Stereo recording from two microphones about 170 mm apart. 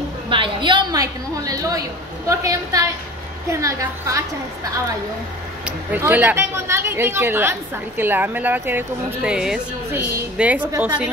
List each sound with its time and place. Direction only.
0.3 s a woman's voice: 30° right (ahead or behind)
5.9 s a woman's voice: 10° right (ahead or behind)